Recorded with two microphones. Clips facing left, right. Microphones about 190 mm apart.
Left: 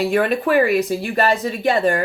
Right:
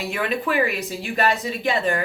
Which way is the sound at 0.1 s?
45° left (ahead or behind).